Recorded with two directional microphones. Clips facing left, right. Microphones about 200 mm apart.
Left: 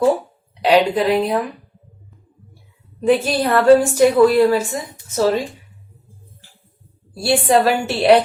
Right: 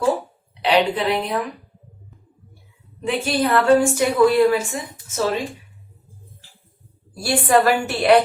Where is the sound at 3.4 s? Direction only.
35° left (ahead or behind).